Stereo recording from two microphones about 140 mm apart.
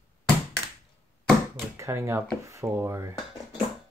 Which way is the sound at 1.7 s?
20° right (ahead or behind).